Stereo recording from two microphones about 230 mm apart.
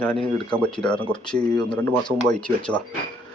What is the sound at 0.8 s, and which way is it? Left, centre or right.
Speech, centre.